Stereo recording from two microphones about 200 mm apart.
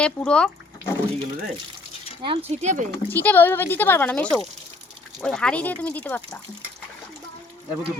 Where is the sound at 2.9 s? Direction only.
10° left (ahead or behind).